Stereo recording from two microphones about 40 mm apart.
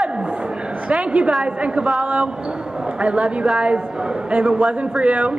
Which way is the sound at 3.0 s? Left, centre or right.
Right.